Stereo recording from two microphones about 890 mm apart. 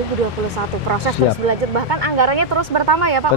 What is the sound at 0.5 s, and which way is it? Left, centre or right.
Speech, right.